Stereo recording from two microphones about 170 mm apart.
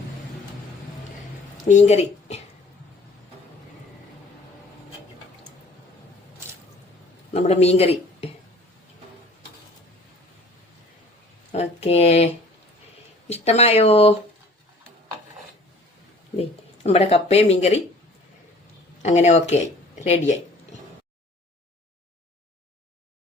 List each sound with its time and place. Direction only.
1.6 s speech: 40° left (ahead or behind)
7.3 s speech: 40° left (ahead or behind)
11.5 s speech: 40° left (ahead or behind)
16.4 s speech: 35° left (ahead or behind)
19.0 s speech: 40° left (ahead or behind)